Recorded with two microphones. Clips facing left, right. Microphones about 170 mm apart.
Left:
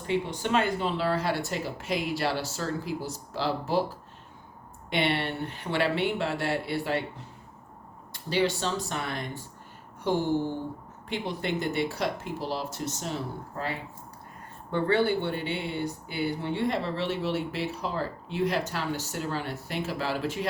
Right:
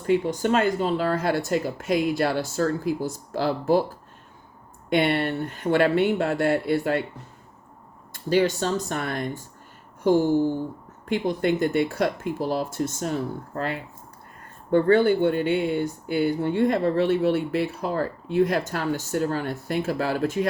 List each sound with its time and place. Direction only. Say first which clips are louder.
0.0 s speech: right 7 dB; 45° right (ahead or behind)
8.1 s speech: right 5 dB; 45° right (ahead or behind)
11.1 s speech: right 8 dB; 50° right (ahead or behind)
14.7 s speech: right 7 dB; 45° right (ahead or behind)